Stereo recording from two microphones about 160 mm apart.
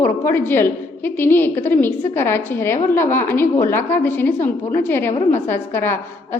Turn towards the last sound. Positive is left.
turn(degrees=15)  # may be behind; listen again after turning